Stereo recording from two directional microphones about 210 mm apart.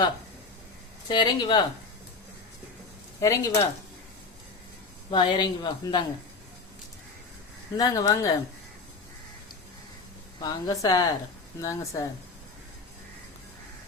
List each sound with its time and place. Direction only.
1.0 s speech: 20° left (ahead or behind)
3.2 s a woman's voice: 15° left (ahead or behind)
5.1 s speech: 20° left (ahead or behind)
7.8 s a woman's voice: 20° left (ahead or behind)
10.4 s a woman's voice: 15° left (ahead or behind)